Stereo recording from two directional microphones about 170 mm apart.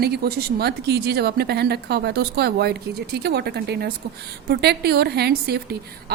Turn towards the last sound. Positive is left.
turn(degrees=-70)  # may be behind; listen again after turning